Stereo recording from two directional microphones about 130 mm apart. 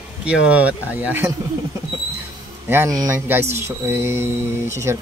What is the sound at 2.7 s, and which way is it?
Speech, 20° right (ahead or behind).